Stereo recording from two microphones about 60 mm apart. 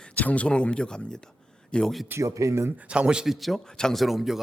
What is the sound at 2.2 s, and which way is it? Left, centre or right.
Speech, right.